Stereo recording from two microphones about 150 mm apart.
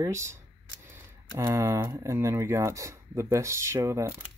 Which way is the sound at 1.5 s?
15° right (ahead or behind).